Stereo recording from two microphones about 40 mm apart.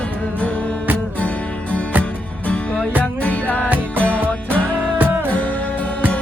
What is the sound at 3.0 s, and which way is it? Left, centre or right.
Music, left.